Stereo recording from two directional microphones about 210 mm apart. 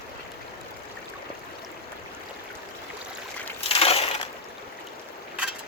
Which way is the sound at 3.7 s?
30° left (ahead or behind).